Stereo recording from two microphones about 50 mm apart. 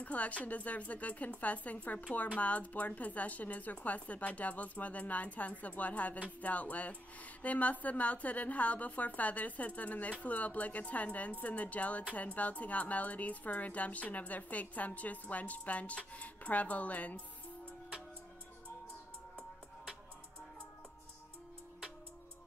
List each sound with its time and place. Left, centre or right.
0.0 s a woman's voice: left